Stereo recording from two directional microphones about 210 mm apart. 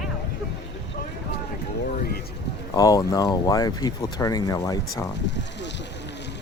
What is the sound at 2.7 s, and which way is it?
Speech, 15° left (ahead or behind).